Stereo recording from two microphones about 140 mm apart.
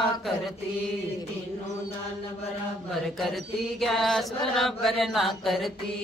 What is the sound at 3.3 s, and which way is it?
Chant, centre (ahead or behind).